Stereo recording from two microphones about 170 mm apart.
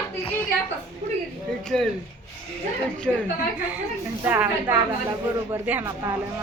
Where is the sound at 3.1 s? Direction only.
Centre (ahead or behind).